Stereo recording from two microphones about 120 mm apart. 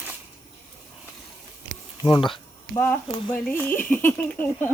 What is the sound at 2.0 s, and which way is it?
Speech, 40° left (ahead or behind).